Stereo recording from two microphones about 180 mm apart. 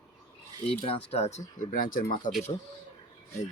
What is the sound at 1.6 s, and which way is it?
Speech, 50° left (ahead or behind).